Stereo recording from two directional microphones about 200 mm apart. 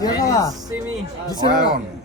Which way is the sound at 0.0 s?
15° left (ahead or behind).